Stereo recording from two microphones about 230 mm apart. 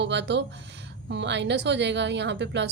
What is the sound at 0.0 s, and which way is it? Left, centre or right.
A woman's voice, right.